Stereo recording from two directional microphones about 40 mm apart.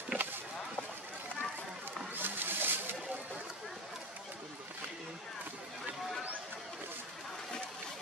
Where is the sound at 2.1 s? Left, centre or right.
Right.